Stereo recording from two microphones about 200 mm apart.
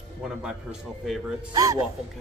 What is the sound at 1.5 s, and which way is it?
Speech, 15° right (ahead or behind).